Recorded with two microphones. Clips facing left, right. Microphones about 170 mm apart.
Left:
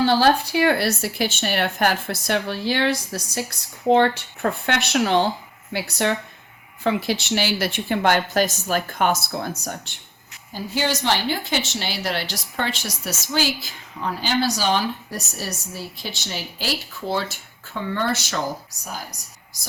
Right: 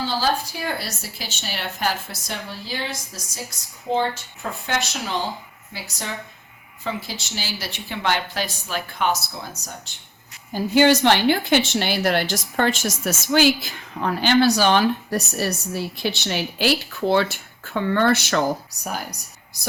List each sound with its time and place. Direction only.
0.0 s speech: 65° left (ahead or behind)
10.5 s a woman's voice: 60° right (ahead or behind)